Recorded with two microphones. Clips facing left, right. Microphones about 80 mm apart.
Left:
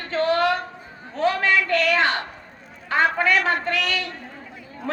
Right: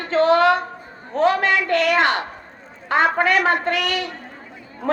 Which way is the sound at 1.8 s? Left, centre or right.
Right.